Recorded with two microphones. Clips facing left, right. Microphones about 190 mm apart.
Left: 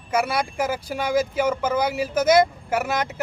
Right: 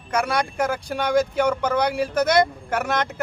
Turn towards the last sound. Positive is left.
turn(degrees=5)  # may be behind; listen again after turning